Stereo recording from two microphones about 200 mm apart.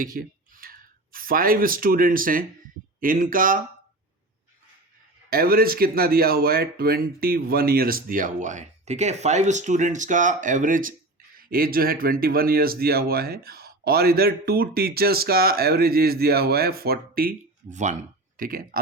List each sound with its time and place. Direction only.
0.0 s speech: 45° right (ahead or behind)
5.3 s speech: 50° right (ahead or behind)